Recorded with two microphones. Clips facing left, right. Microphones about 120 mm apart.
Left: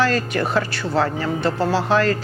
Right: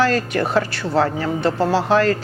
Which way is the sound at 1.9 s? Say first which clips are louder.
Right 2 dB; 50° right (ahead or behind).